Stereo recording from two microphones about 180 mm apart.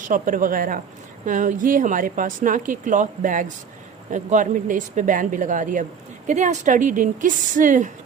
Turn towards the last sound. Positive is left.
turn(degrees=-45)  # may be behind; listen again after turning